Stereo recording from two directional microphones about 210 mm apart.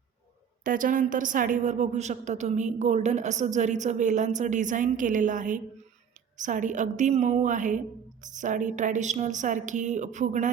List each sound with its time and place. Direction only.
0.6 s a woman's voice: 40° right (ahead or behind)